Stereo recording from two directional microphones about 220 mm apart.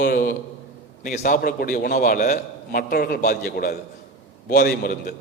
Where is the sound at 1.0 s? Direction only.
40° left (ahead or behind).